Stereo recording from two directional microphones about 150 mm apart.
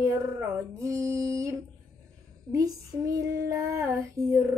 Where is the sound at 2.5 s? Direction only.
20° right (ahead or behind).